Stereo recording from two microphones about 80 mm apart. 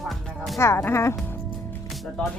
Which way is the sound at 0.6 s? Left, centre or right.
Left.